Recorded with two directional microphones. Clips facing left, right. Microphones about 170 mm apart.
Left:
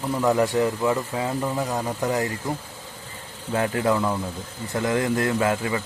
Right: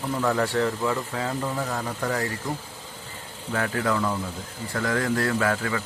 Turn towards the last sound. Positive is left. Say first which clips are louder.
# left 2 dB
turn(degrees=20)  # may be behind; listen again after turning